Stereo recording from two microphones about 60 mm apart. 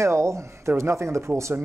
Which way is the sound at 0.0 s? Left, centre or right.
Right.